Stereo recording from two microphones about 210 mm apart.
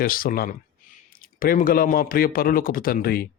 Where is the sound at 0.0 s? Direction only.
45° left (ahead or behind).